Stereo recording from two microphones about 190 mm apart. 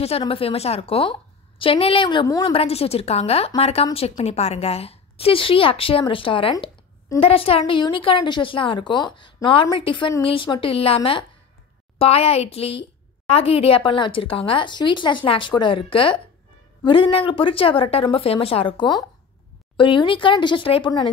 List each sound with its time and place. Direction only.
0.0 s a woman's voice: 30° left (ahead or behind)
2.5 s a woman's voice: 30° left (ahead or behind)